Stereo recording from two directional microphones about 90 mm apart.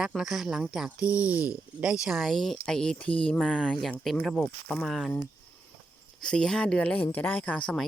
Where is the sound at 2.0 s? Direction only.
5° right (ahead or behind).